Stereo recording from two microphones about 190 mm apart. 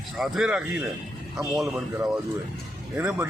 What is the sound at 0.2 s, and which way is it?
Speech, centre (ahead or behind).